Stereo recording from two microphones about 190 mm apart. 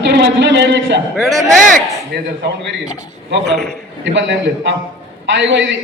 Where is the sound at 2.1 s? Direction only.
60° right (ahead or behind).